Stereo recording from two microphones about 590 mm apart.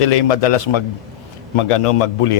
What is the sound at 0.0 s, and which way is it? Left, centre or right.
A man's voice, left.